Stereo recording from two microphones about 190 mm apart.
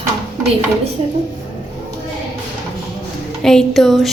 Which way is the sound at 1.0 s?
30° right (ahead or behind).